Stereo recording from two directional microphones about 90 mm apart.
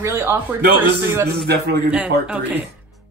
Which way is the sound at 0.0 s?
30° right (ahead or behind).